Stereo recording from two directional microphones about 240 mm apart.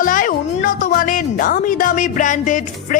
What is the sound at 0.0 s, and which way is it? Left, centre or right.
Speech, left.